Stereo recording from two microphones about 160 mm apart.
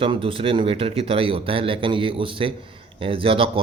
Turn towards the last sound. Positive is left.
turn(degrees=-35)  # may be behind; listen again after turning